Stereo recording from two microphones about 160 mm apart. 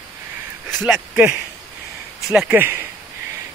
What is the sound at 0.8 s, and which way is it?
Speech, 10° right (ahead or behind).